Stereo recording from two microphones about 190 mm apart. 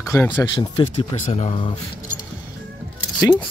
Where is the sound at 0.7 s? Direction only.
30° left (ahead or behind).